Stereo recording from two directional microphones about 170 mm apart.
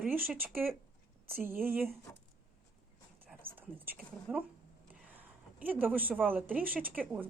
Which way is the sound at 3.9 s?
Centre (ahead or behind).